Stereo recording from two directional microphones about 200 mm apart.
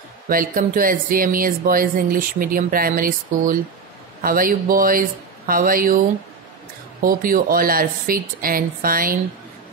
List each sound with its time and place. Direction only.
0.3 s speech: 45° right (ahead or behind)
7.0 s speech: 45° right (ahead or behind)